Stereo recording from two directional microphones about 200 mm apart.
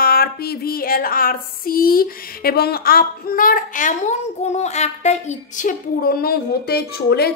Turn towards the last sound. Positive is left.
turn(degrees=50)  # may be behind; listen again after turning